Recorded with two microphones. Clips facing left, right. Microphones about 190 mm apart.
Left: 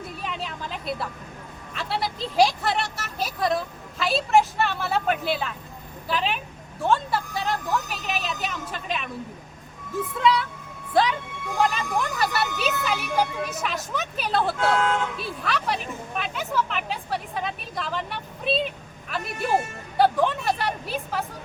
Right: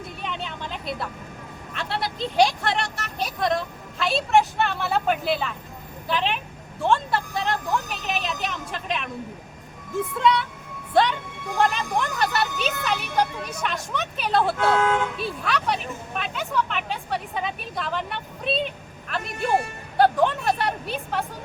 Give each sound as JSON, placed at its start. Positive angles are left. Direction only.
{"t": 0.2, "sound": "vehicle", "side_deg": 0}
{"t": 1.7, "sound": "a woman's voice", "side_deg": 0}
{"t": 10.2, "sound": "speech", "side_deg": 0}